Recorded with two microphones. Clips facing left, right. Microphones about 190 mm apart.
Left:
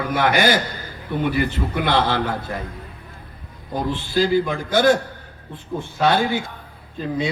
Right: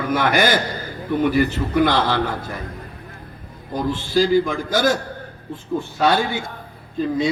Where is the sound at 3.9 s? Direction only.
45° right (ahead or behind).